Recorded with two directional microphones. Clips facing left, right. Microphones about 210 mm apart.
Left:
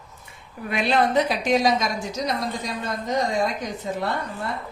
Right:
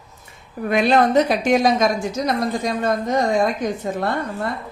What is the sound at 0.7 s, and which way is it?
A woman's voice, 45° right (ahead or behind).